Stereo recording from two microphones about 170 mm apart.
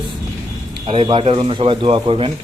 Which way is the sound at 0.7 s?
30° right (ahead or behind).